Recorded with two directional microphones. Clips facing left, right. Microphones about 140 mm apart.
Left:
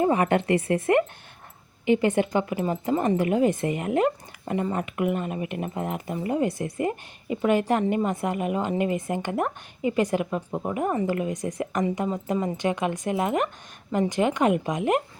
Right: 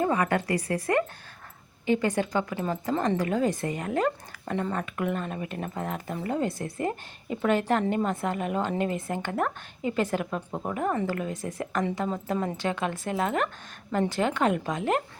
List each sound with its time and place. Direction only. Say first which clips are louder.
0.0 s speech: left 4 dB; 20° left (ahead or behind)